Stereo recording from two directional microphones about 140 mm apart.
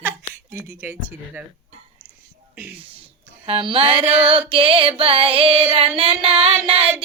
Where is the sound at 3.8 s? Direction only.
10° right (ahead or behind).